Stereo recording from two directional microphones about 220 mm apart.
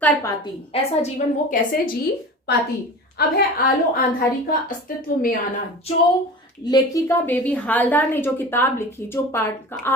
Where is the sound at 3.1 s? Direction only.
40° left (ahead or behind).